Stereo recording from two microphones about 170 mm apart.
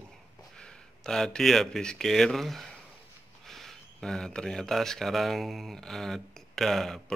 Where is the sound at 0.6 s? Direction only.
5° left (ahead or behind).